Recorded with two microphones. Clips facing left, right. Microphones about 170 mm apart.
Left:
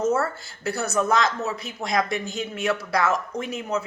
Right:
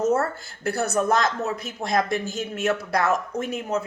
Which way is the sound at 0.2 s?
55° right (ahead or behind).